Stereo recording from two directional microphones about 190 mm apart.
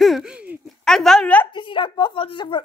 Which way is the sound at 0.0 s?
Centre (ahead or behind).